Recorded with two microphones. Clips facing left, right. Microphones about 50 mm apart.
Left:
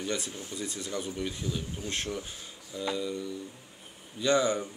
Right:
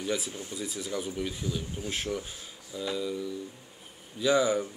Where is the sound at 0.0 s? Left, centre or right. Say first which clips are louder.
Right 2 dB; centre.